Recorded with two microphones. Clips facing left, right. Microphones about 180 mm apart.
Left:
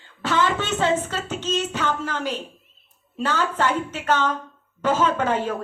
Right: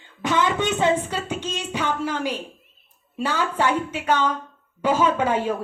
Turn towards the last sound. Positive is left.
turn(degrees=-10)  # may be behind; listen again after turning